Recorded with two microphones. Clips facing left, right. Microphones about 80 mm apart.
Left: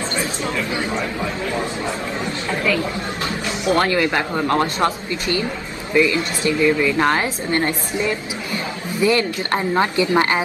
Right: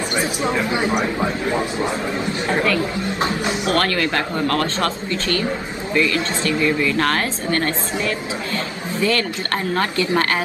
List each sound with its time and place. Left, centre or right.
0.2 s a man's voice: right
3.2 s a man's voice: right
3.6 s a woman's voice: centre